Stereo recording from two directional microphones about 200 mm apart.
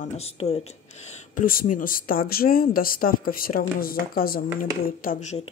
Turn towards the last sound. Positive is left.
turn(degrees=40)  # may be behind; listen again after turning